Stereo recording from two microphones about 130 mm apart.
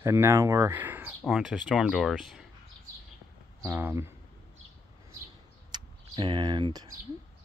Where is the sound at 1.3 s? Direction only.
5° right (ahead or behind).